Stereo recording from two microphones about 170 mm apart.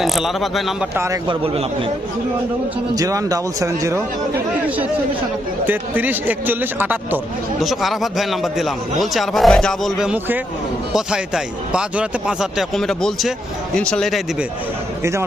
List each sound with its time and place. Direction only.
0.0 s a man's voice: centre (ahead or behind)
0.9 s speech: 15° right (ahead or behind)
1.3 s a man's voice: 30° right (ahead or behind)
2.9 s speech: 20° right (ahead or behind)
5.6 s a man's voice: 10° right (ahead or behind)